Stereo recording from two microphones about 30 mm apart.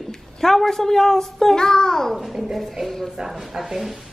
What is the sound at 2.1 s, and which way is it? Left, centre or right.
Speech, centre.